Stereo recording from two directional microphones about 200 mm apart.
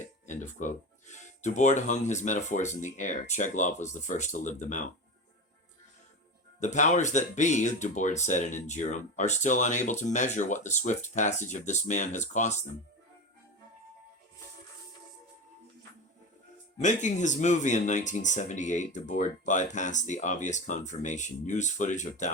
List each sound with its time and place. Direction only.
0.3 s speech: 40° left (ahead or behind)
6.6 s speech: 35° left (ahead or behind)
16.8 s speech: 35° left (ahead or behind)